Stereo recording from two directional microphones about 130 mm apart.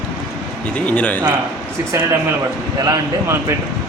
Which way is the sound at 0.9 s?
10° left (ahead or behind).